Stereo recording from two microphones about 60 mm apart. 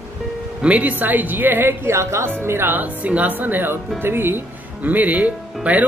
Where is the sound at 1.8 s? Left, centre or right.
Right.